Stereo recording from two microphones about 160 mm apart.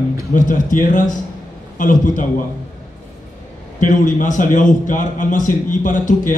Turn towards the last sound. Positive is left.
turn(degrees=55)  # may be behind; listen again after turning